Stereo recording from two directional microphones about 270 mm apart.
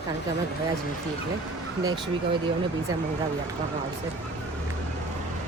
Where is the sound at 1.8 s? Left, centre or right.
Centre.